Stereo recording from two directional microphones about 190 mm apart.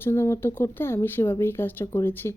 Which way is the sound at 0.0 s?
10° left (ahead or behind).